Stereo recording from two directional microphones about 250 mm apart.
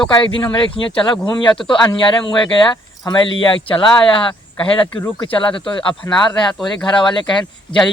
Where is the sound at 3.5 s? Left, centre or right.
Centre.